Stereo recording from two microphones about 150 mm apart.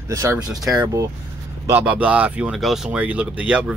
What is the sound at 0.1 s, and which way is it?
Speech, 20° right (ahead or behind).